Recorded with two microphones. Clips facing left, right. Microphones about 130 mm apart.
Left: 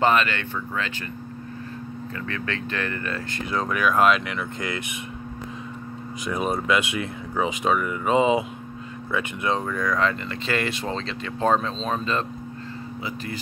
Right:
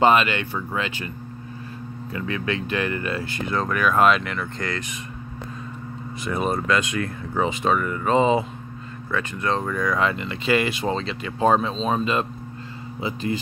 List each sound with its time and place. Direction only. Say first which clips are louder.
0.0 s speech: right 3 dB; 15° right (ahead or behind)
2.1 s speech: right 5 dB; 15° right (ahead or behind)
3.4 s speech: right 1 dB; 5° left (ahead or behind)
6.2 s speech: right 1 dB; centre (ahead or behind)
6.7 s speech: right 1 dB; 15° left (ahead or behind)
9.6 s speech: right 1 dB; centre (ahead or behind)
13.0 s speech: right 8 dB; 25° right (ahead or behind)